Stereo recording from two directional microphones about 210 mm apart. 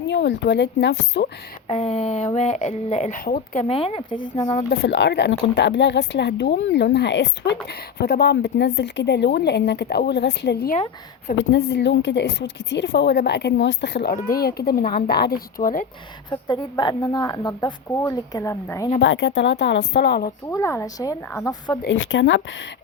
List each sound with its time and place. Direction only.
0.1 s a woman's voice: 55° left (ahead or behind)
1.6 s speech: 30° left (ahead or behind)
4.7 s a woman's voice: 55° left (ahead or behind)
16.3 s a woman's voice: 20° left (ahead or behind)
18.9 s a woman's voice: 60° left (ahead or behind)
20.5 s a woman's voice: 15° left (ahead or behind)
21.8 s a woman's voice: 60° left (ahead or behind)